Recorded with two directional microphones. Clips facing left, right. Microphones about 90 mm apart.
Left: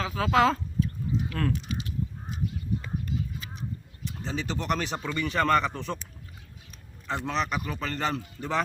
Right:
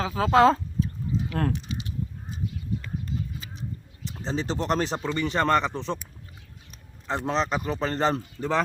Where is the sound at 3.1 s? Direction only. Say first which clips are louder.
Even; 30° right (ahead or behind).